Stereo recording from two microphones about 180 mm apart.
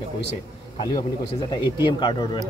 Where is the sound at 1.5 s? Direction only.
25° left (ahead or behind).